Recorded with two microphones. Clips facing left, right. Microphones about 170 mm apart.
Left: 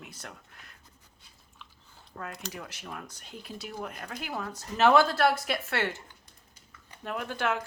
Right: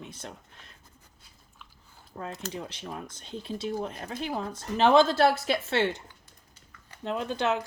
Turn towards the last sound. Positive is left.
turn(degrees=-20)  # may be behind; listen again after turning